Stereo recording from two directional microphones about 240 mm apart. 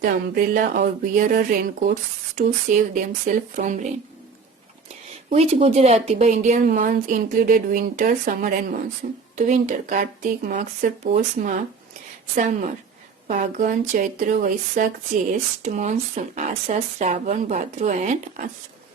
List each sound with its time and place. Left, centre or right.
0.0 s speech: right
5.3 s speech: right